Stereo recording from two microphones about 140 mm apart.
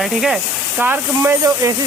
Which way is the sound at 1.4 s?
25° right (ahead or behind).